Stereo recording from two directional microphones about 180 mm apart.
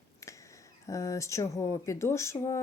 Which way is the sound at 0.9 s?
15° left (ahead or behind).